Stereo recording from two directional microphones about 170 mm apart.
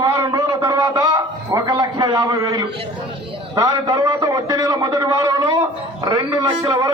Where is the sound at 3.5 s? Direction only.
20° right (ahead or behind).